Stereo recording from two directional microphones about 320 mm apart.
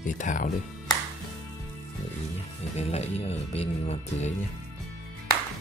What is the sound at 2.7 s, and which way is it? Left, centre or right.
Speech, centre.